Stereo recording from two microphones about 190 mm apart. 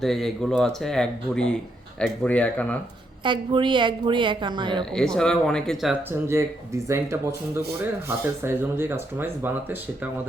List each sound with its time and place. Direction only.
0.0 s speech: centre (ahead or behind)
3.2 s a woman's voice: 25° right (ahead or behind)
4.9 s speech: 5° left (ahead or behind)
5.9 s speech: 15° right (ahead or behind)